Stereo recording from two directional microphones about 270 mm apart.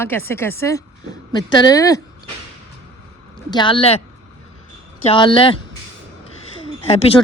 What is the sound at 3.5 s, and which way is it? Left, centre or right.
Speech, centre.